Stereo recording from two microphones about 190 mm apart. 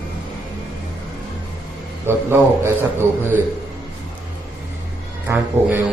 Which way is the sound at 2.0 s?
10° right (ahead or behind).